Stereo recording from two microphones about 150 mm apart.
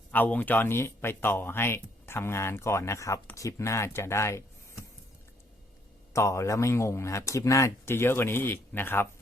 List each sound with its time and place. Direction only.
0.1 s speech: 10° left (ahead or behind)
6.1 s speech: 20° left (ahead or behind)